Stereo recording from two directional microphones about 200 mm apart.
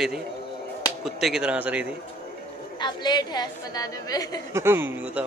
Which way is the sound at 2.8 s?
20° left (ahead or behind).